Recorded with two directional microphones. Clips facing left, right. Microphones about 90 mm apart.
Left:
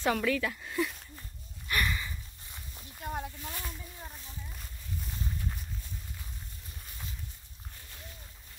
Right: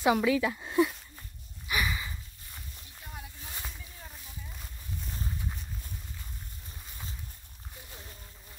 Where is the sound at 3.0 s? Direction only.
50° left (ahead or behind).